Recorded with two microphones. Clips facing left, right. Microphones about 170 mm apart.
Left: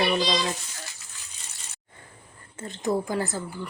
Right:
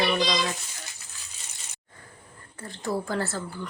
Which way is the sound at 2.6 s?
20° left (ahead or behind).